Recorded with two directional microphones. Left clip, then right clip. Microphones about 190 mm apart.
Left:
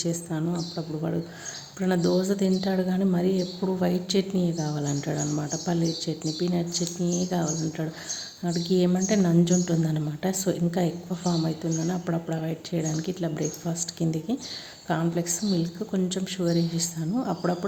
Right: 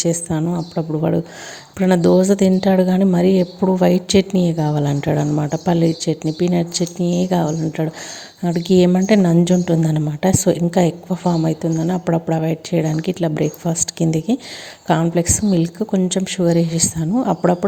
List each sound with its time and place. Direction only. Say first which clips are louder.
0.0 s speech: right 10 dB; 45° right (ahead or behind)